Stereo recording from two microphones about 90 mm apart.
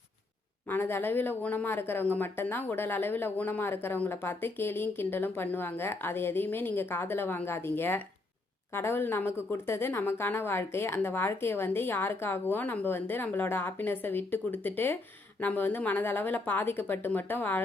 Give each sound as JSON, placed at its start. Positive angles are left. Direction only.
{"t": 0.7, "sound": "speech", "side_deg": 25}